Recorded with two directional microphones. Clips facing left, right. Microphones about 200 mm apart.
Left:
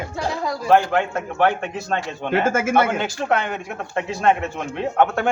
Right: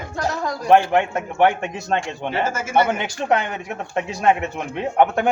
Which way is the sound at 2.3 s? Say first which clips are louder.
Left 4 dB; 55° left (ahead or behind).